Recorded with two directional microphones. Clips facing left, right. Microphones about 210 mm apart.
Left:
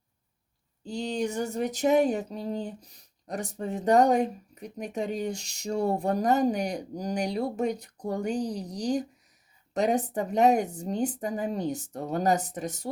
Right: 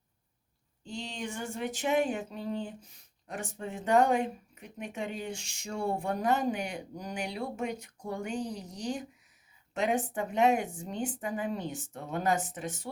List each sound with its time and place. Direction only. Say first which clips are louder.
0.9 s speech: left 9 dB; 40° left (ahead or behind)